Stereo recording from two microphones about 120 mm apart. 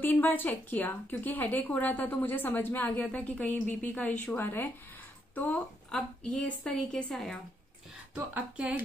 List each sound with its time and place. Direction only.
0.0 s speech: 15° left (ahead or behind)
8.1 s speech: 10° right (ahead or behind)